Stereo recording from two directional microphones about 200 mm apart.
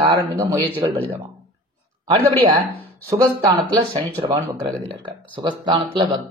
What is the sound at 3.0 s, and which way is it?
A man's voice, 20° right (ahead or behind).